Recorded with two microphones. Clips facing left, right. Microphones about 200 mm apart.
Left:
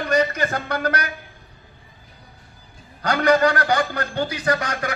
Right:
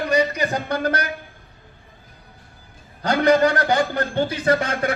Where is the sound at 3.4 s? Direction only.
15° right (ahead or behind).